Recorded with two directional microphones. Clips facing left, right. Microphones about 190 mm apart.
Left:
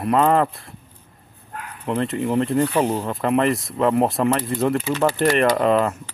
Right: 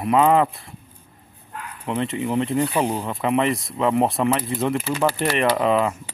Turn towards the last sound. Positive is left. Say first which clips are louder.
# left 1 dB
turn(degrees=0)  # may be behind; listen again after turning